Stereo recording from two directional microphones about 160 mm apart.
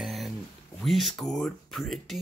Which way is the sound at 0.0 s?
Centre (ahead or behind).